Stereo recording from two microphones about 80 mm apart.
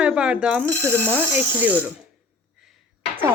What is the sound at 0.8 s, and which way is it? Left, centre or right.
Speech, centre.